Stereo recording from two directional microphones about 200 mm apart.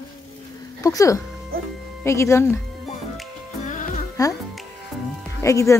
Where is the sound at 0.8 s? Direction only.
15° left (ahead or behind).